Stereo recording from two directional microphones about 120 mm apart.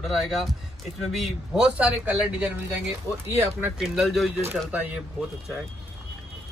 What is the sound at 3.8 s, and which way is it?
Speech, centre (ahead or behind).